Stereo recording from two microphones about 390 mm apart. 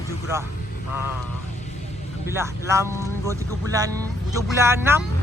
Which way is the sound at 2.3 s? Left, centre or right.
Centre.